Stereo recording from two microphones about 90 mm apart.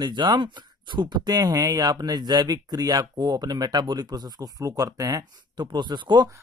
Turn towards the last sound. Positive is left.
turn(degrees=-55)  # may be behind; listen again after turning